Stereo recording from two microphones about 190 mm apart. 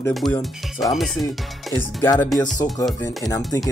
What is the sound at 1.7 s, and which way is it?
Speech, 10° left (ahead or behind).